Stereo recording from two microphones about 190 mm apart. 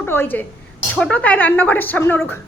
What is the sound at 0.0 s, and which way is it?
A woman's voice, 10° left (ahead or behind).